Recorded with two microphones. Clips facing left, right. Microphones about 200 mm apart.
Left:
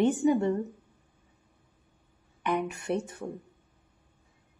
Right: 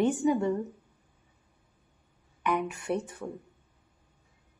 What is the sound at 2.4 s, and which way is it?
Speech, 25° left (ahead or behind).